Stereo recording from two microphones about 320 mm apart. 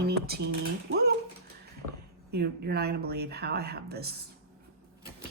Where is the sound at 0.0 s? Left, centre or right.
Right.